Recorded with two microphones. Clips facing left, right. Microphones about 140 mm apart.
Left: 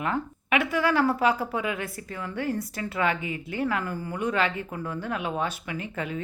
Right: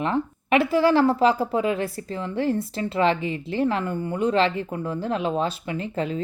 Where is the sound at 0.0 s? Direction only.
30° right (ahead or behind).